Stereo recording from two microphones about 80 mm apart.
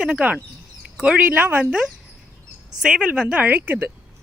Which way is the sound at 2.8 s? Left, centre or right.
Centre.